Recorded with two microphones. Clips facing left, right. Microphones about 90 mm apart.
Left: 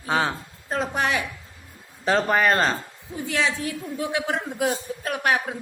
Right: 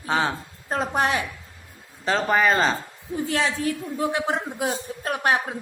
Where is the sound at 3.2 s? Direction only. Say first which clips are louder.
Right 1 dB; 40° right (ahead or behind).